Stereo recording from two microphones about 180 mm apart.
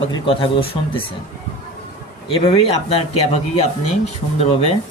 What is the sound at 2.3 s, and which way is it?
A man's voice, 30° left (ahead or behind).